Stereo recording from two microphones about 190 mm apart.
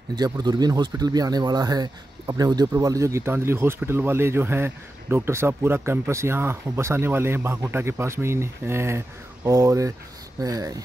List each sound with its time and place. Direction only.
0.1 s speech: 20° right (ahead or behind)